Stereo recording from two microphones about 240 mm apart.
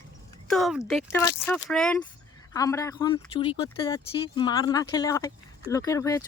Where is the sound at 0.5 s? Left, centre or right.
Centre.